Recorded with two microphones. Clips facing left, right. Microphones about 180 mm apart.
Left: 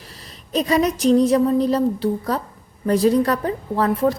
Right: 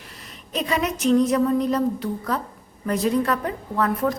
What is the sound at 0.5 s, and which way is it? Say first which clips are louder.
A woman's voice: left 6 dB; 35° left (ahead or behind).